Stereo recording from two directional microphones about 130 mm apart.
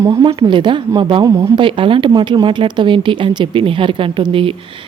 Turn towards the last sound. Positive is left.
turn(degrees=-40)  # may be behind; listen again after turning